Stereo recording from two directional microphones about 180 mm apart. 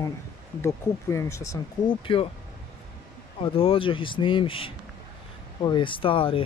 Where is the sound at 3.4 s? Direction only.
30° left (ahead or behind).